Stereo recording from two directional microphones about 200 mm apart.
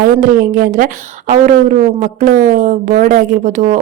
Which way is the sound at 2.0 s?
40° right (ahead or behind).